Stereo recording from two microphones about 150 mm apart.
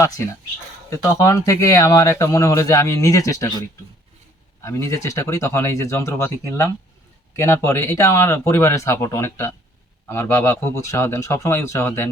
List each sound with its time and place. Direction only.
0.2 s speech: 20° left (ahead or behind)
4.6 s speech: 20° left (ahead or behind)